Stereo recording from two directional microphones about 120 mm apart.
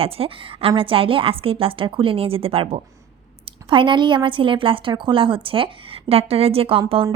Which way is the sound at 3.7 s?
40° right (ahead or behind).